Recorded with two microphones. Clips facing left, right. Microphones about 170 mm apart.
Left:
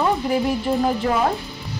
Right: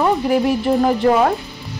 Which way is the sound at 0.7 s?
90° right.